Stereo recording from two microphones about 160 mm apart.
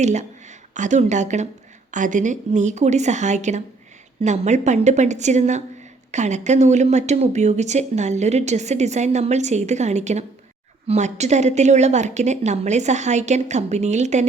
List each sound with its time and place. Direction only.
0.0 s speech: 45° right (ahead or behind)